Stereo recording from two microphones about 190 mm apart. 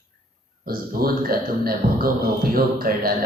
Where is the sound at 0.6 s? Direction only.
50° right (ahead or behind).